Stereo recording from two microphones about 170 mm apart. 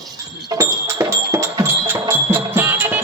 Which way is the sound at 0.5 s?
15° right (ahead or behind).